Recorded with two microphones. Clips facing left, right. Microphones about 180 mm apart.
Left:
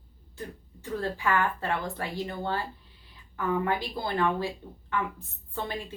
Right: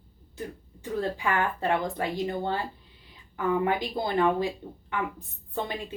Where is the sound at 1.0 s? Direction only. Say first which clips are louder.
Even; 15° right (ahead or behind).